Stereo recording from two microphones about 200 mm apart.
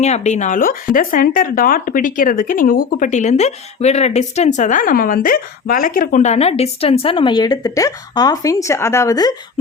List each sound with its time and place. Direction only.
0.0 s speech: 35° left (ahead or behind); by 9.3 s 20° left (ahead or behind)